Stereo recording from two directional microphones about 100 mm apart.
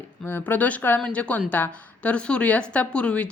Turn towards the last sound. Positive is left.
turn(degrees=10)  # may be behind; listen again after turning